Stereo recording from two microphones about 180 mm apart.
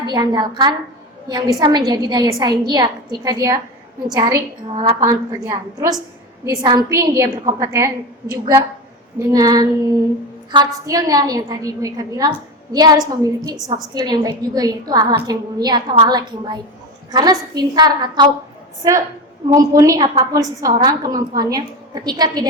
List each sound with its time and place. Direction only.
0.0 s a woman's voice: 25° right (ahead or behind)
4.7 s a woman's voice: 35° right (ahead or behind)
5.0 s a woman's voice: 20° right (ahead or behind)